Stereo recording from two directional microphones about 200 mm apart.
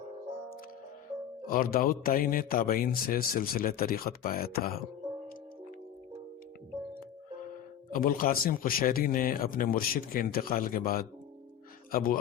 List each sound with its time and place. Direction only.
1.5 s a man's voice: 45° left (ahead or behind)
7.9 s a man's voice: 45° left (ahead or behind)